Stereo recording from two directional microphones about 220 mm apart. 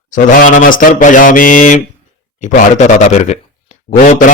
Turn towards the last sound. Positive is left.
turn(degrees=35)  # may be behind; listen again after turning